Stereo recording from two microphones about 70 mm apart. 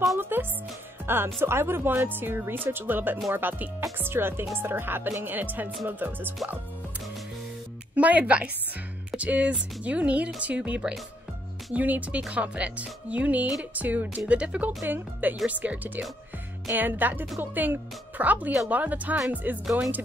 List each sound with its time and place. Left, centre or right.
0.2 s speech: right
7.9 s a woman's voice: right
19.6 s speech: centre